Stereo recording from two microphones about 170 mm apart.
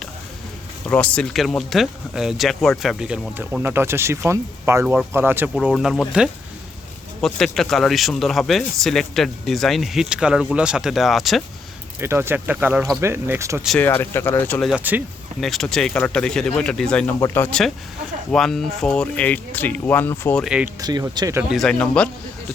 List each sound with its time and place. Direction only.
0.9 s speech: 5° left (ahead or behind); by 5.5 s 10° right (ahead or behind)
5.5 s speech: centre (ahead or behind)
11.9 s speech: 15° right (ahead or behind)
13.7 s speech: 10° left (ahead or behind)
14.7 s speech: 10° right (ahead or behind)
15.4 s speech: centre (ahead or behind)
17.2 s speech: 15° left (ahead or behind)
20.4 s speech: 5° right (ahead or behind)
20.8 s speech: 25° right (ahead or behind)
21.5 s speech: centre (ahead or behind)